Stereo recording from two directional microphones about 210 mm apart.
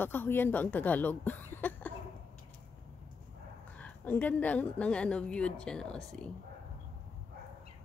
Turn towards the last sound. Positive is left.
turn(degrees=0)  # may be behind; listen again after turning